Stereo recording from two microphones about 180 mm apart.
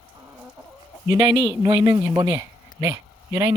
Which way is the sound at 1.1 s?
25° right (ahead or behind).